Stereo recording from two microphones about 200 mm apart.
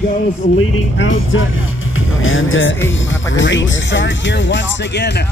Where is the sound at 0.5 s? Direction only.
80° left.